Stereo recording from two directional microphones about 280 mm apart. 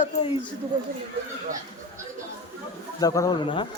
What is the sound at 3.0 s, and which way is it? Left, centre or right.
Speech, centre.